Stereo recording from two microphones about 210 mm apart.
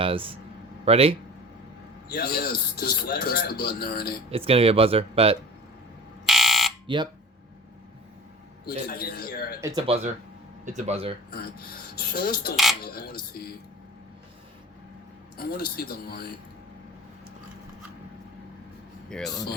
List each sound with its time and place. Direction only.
0.0 s speech: 25° right (ahead or behind)
2.0 s speech: 45° left (ahead or behind)
4.3 s speech: 25° right (ahead or behind)
6.2 s fire alarm: centre (ahead or behind)
6.8 s speech: 20° right (ahead or behind)
8.6 s speech: 45° left (ahead or behind)
9.6 s speech: 15° right (ahead or behind)
9.8 s speech: 30° right (ahead or behind)
11.9 s speech: 45° left (ahead or behind)
15.4 s speech: 45° left (ahead or behind)
19.0 s speech: centre (ahead or behind)